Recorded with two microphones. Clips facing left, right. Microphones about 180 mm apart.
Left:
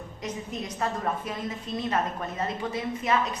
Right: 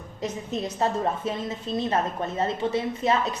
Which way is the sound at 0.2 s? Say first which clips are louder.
Right 5 dB; 25° right (ahead or behind).